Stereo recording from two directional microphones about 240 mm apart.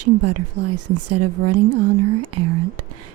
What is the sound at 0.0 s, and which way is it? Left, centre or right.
A woman's voice, right.